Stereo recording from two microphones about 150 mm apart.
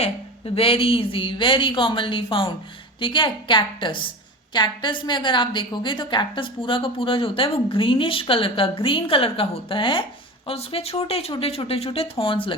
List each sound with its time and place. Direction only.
0.0 s a woman's voice: 40° left (ahead or behind)